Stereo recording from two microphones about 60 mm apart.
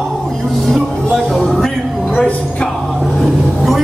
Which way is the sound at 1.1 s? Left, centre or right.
Centre.